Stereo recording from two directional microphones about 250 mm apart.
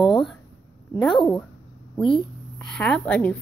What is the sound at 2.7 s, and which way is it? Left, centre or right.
Speech, centre.